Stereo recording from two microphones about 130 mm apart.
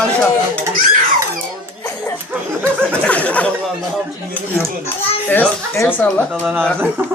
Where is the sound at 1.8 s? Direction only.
20° left (ahead or behind).